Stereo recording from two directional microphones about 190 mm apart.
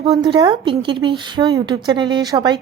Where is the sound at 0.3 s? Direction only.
20° right (ahead or behind).